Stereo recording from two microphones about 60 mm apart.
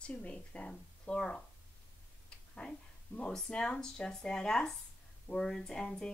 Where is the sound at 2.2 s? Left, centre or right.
Centre.